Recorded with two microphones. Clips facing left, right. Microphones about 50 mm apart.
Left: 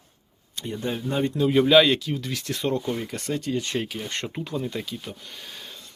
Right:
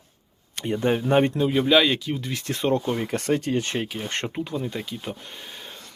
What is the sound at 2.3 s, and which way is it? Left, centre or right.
Speech, right.